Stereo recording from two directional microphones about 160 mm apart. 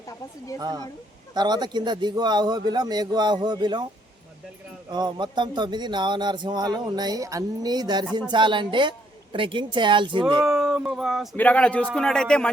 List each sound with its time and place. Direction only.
1.3 s speech: 25° right (ahead or behind)
4.9 s a woman's voice: 25° right (ahead or behind)
10.4 s dog: 5° right (ahead or behind)
11.3 s a man's voice: 10° left (ahead or behind)